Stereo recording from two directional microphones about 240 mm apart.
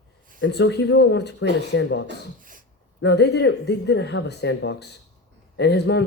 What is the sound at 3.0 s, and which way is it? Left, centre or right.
Speech, left.